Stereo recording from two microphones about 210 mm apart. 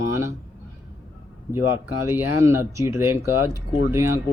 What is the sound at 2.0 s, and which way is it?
Speech, 10° right (ahead or behind).